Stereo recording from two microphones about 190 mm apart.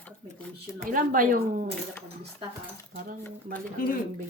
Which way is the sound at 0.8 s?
45° right (ahead or behind).